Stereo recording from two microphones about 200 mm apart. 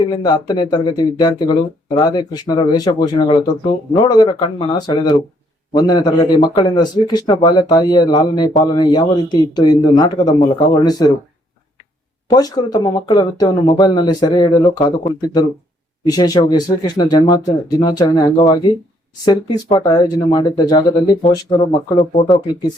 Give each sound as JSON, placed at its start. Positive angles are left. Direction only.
{"t": 0.1, "sound": "speech", "side_deg": 20}
{"t": 12.3, "sound": "speech", "side_deg": 20}